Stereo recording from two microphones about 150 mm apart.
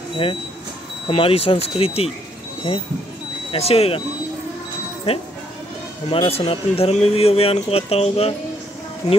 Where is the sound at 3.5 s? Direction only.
40° left (ahead or behind).